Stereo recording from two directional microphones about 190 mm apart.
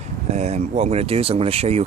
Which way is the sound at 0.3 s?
35° right (ahead or behind).